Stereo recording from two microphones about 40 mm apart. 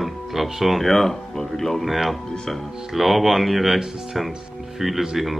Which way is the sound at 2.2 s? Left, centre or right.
Centre.